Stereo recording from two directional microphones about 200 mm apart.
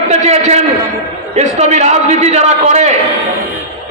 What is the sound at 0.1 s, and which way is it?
A man's voice, 35° right (ahead or behind).